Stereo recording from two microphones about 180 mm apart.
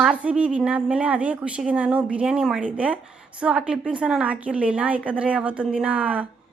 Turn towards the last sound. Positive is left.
turn(degrees=-5)  # may be behind; listen again after turning